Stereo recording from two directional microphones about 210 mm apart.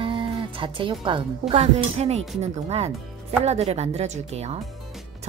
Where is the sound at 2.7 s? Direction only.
30° right (ahead or behind).